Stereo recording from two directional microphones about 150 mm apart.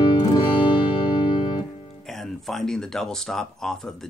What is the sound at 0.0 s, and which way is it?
Music, 30° left (ahead or behind).